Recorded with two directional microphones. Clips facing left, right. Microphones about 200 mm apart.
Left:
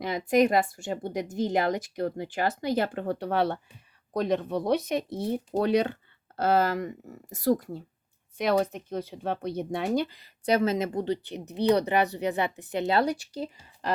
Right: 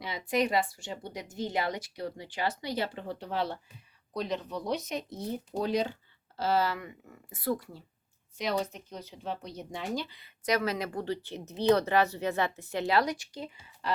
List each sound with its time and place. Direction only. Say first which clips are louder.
0.0 s speech: left 7 dB; 50° left (ahead or behind)
8.4 s speech: left 7 dB; 55° left (ahead or behind); by 13.9 s 35° left (ahead or behind)